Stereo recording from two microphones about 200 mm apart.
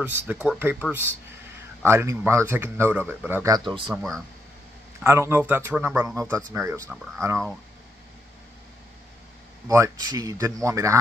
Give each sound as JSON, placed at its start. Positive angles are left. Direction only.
{"t": 0.0, "sound": "speech", "side_deg": -10}
{"t": 1.9, "sound": "speech", "side_deg": -10}
{"t": 5.0, "sound": "speech", "side_deg": -15}
{"t": 9.7, "sound": "speech", "side_deg": -15}